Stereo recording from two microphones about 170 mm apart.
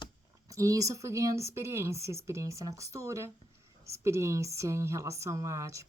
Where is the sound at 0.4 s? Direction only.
20° right (ahead or behind).